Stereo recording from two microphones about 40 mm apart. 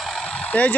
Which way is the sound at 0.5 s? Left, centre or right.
Left.